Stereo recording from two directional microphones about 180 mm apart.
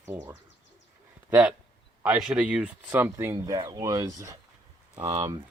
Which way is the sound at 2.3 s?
5° right (ahead or behind).